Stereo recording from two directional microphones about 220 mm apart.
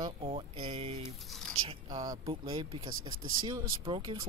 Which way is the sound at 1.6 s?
20° right (ahead or behind).